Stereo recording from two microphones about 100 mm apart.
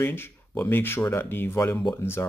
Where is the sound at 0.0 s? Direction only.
25° left (ahead or behind).